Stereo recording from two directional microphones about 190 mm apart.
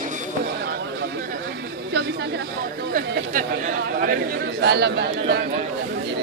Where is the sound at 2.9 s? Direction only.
45° right (ahead or behind).